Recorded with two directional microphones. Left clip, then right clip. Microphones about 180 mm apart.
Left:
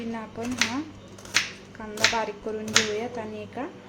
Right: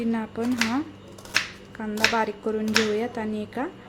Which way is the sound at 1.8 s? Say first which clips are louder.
Right 1 dB; 20° right (ahead or behind).